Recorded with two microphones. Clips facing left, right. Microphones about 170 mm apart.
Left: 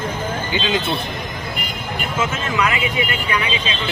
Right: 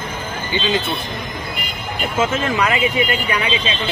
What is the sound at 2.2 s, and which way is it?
Speech, 30° right (ahead or behind).